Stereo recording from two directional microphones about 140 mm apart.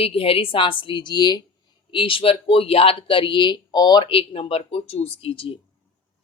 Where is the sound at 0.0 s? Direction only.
40° left (ahead or behind).